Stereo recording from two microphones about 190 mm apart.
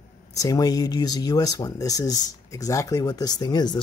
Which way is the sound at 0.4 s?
20° left (ahead or behind).